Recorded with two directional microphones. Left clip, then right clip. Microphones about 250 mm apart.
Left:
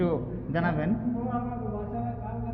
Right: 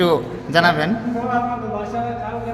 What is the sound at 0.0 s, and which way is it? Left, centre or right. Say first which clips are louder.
Speech: right 12 dB; right.